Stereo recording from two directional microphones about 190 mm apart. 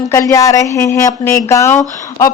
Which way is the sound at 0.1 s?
15° left (ahead or behind).